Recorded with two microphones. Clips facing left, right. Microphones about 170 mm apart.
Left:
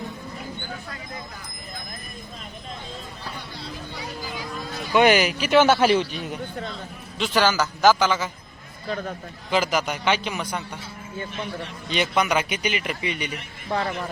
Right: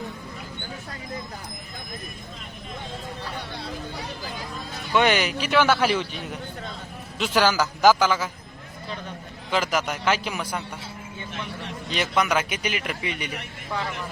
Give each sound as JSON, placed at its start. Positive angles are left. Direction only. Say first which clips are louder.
{"t": 4.9, "sound": "speech", "louder": "left 3 dB", "side_deg": 10}
{"t": 5.5, "sound": "a man's voice", "louder": "left 4 dB", "side_deg": 25}
{"t": 7.2, "sound": "speech", "louder": "even", "side_deg": -5}
{"t": 9.5, "sound": "speech", "louder": "left 2 dB", "side_deg": 0}
{"t": 11.9, "sound": "speech", "louder": "left 1 dB", "side_deg": 0}